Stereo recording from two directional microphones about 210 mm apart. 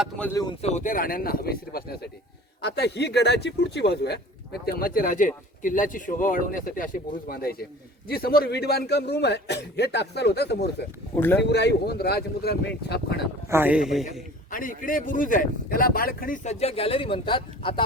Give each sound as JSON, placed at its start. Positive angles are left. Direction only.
{"t": 0.6, "sound": "a man's voice", "side_deg": 35}
{"t": 11.1, "sound": "speech", "side_deg": 10}
{"t": 11.4, "sound": "a man's voice", "side_deg": 50}
{"t": 13.5, "sound": "speech", "side_deg": -10}
{"t": 14.5, "sound": "speech", "side_deg": 40}